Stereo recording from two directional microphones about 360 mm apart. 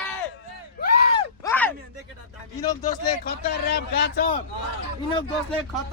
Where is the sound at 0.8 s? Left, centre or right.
Left.